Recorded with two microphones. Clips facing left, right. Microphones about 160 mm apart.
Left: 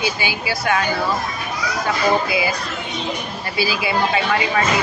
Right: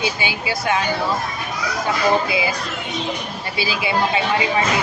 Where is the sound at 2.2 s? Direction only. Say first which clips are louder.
Left 1 dB; 20° right (ahead or behind).